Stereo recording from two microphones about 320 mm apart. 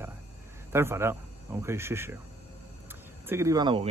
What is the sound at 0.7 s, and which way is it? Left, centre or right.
Speech, centre.